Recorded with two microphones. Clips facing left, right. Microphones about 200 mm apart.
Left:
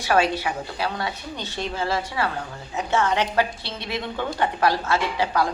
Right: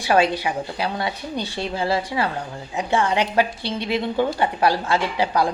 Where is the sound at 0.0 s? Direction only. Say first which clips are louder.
Right 2 dB; 15° right (ahead or behind).